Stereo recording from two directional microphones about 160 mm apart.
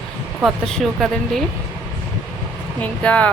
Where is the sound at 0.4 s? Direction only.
5° left (ahead or behind).